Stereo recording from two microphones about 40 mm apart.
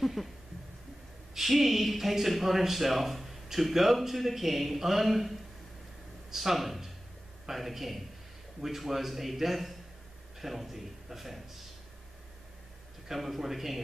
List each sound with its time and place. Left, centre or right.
0.0 s a sound: centre
1.3 s speech: centre
6.3 s speech: centre
13.1 s speech: centre